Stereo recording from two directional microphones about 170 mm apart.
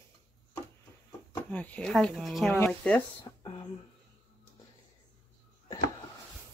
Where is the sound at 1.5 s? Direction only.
10° left (ahead or behind).